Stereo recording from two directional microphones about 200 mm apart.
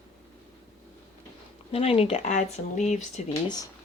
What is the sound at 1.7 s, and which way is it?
Speech, 30° left (ahead or behind).